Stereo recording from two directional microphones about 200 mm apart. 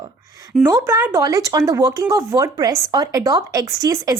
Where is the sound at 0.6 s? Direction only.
15° right (ahead or behind).